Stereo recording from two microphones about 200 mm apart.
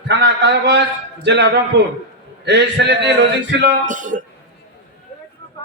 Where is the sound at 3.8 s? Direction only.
40° right (ahead or behind).